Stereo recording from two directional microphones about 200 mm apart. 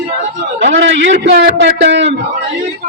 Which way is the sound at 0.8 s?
65° right (ahead or behind).